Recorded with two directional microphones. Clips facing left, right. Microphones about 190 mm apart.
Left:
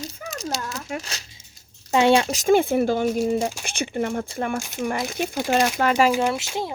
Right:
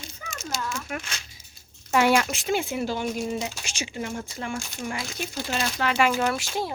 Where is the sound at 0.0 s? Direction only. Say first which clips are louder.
Left 7 dB; 35° left (ahead or behind).